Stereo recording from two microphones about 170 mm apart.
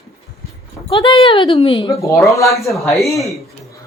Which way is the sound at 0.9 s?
30° left (ahead or behind).